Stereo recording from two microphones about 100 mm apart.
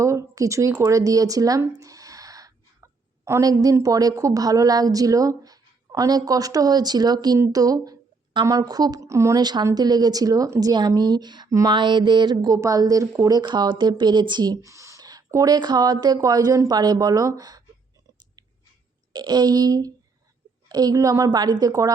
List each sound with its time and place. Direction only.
0.0 s a sound: 30° right (ahead or behind)
3.8 s speech: 35° right (ahead or behind)
9.4 s speech: 45° right (ahead or behind)
12.5 s speech: 35° right (ahead or behind)
19.1 s speech: 45° right (ahead or behind)